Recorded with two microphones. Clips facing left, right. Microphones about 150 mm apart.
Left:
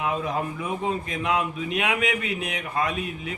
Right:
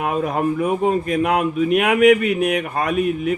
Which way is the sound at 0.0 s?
55° right (ahead or behind).